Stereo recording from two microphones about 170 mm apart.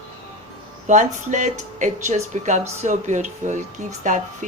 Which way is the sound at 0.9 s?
45° right (ahead or behind).